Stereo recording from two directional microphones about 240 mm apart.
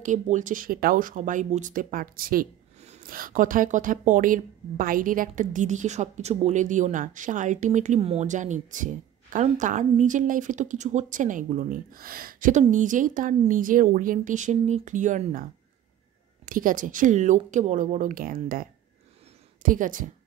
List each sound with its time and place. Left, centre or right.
0.0 s speech: right
16.4 s speech: right